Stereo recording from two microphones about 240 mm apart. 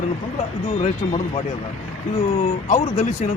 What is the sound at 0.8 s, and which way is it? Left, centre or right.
Speech, left.